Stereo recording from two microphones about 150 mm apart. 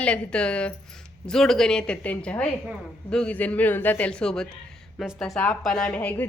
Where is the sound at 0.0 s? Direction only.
5° left (ahead or behind).